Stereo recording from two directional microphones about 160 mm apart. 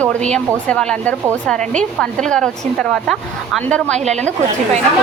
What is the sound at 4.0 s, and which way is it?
Speech, 45° right (ahead or behind).